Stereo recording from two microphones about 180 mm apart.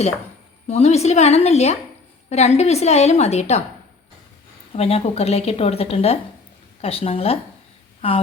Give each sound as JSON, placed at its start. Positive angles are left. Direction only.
{"t": 0.7, "sound": "a woman's voice", "side_deg": 35}
{"t": 4.7, "sound": "a woman's voice", "side_deg": 35}